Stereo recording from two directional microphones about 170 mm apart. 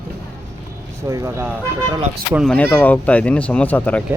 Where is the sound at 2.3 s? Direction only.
5° right (ahead or behind).